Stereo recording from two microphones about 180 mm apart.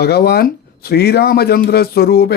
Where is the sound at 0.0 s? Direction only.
60° left (ahead or behind).